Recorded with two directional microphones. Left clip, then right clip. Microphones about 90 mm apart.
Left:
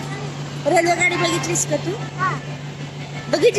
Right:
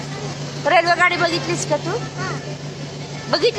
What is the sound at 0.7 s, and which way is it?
Speech, 20° left (ahead or behind).